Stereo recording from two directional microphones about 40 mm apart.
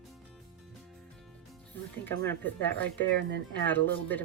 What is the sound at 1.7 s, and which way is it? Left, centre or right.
Speech, left.